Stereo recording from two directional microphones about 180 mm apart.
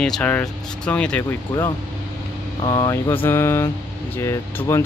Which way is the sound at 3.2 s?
15° left (ahead or behind).